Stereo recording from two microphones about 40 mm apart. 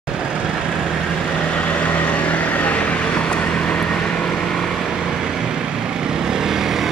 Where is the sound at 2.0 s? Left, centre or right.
Left; by 4.6 s centre.